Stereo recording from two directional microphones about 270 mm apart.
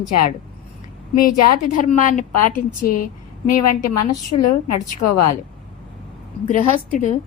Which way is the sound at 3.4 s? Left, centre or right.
Left.